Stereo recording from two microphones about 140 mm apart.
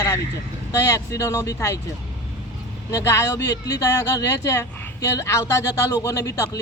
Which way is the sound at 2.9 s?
20° left (ahead or behind).